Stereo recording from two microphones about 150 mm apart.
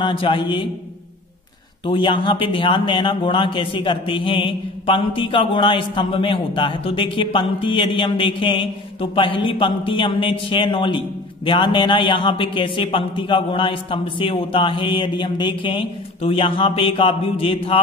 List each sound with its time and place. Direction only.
0.0 s a man's voice: 35° left (ahead or behind)
1.9 s a man's voice: 30° left (ahead or behind)